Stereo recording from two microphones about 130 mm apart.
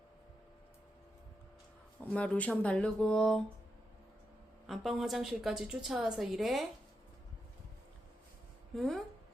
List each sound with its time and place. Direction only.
2.0 s speech: 10° left (ahead or behind)
4.6 s a woman's voice: centre (ahead or behind)
8.7 s a woman's voice: centre (ahead or behind)